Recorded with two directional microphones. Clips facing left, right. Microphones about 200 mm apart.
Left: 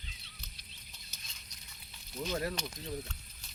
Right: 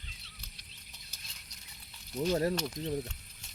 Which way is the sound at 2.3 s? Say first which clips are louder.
Right 4 dB; 35° right (ahead or behind).